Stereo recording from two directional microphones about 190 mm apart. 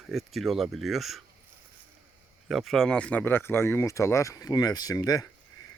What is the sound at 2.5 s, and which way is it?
Speech, centre (ahead or behind).